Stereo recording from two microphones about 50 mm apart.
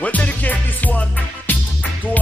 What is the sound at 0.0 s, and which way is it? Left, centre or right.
Music, left.